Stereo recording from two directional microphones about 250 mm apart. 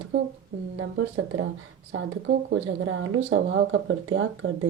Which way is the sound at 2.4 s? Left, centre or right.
Right.